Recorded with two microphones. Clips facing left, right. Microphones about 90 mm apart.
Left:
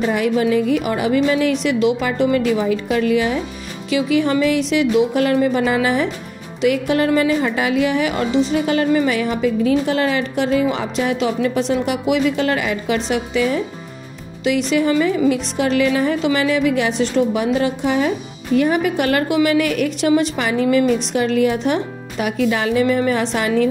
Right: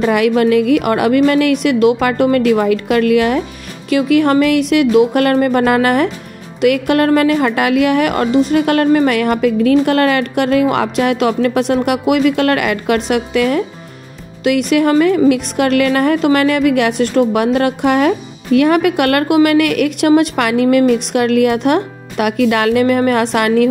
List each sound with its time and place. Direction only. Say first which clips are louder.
0.0 s a woman's voice: right 5 dB; 70° right (ahead or behind)